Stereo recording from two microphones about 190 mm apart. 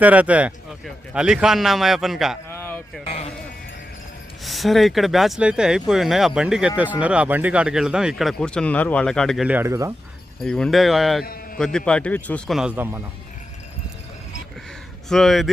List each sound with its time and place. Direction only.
0.0 s speech: 5° right (ahead or behind)
2.5 s a sound: 10° left (ahead or behind)
3.0 s sheep: 35° left (ahead or behind)
4.4 s speech: centre (ahead or behind); by 9.9 s 15° right (ahead or behind)
10.4 s speech: 5° left (ahead or behind)
15.1 s speech: centre (ahead or behind)